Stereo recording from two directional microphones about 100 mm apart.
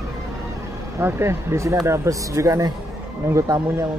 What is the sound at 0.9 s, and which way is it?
Speech, 25° right (ahead or behind).